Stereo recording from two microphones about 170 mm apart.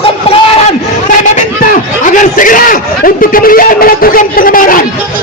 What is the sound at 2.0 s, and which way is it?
A man's voice, 50° left (ahead or behind).